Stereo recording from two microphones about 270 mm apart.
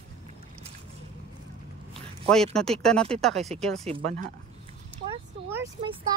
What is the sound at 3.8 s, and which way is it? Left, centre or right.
Speech, right.